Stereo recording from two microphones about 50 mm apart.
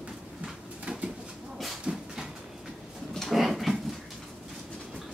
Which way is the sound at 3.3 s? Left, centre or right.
Centre.